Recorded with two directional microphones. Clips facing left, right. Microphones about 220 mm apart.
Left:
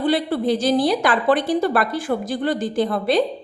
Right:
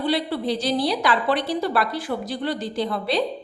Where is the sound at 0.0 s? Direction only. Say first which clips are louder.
Left 4 dB; 50° left (ahead or behind).